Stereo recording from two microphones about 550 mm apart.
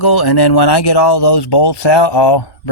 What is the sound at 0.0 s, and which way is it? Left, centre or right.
Speech, left.